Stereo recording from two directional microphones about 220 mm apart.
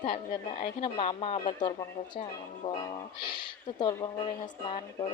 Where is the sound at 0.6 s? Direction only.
25° left (ahead or behind).